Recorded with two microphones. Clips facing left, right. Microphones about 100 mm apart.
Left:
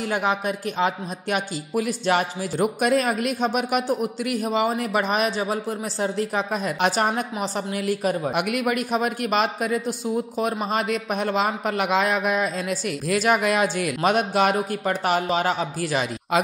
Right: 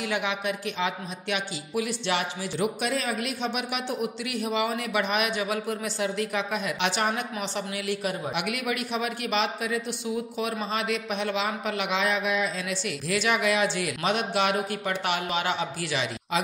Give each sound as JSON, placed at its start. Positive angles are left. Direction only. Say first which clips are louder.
{"t": 0.0, "sound": "speech", "louder": "left 5 dB", "side_deg": 40}